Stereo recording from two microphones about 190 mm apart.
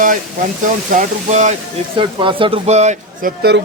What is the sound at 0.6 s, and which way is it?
Speech, 40° right (ahead or behind).